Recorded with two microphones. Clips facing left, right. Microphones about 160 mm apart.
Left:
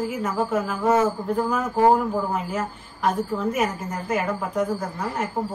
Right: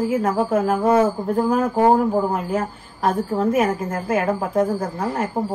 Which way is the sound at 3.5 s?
40° right (ahead or behind).